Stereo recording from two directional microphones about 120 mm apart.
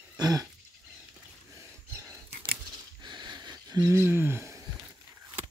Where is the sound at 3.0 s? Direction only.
40° right (ahead or behind).